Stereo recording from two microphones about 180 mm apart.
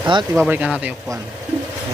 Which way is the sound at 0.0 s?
25° right (ahead or behind).